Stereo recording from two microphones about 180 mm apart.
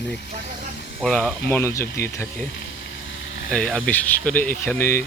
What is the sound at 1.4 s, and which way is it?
Speech, 15° left (ahead or behind).